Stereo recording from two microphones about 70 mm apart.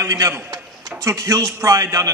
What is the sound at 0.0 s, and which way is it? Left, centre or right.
A man's voice, right.